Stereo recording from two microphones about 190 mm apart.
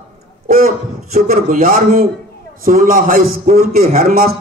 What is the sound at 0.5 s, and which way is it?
A man's voice, 50° right (ahead or behind).